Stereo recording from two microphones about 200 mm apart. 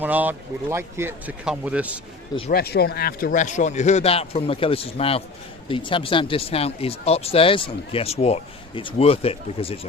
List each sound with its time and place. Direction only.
0.0 s speech: 10° right (ahead or behind)
2.5 s speech: 50° left (ahead or behind); by 9.8 s 30° left (ahead or behind)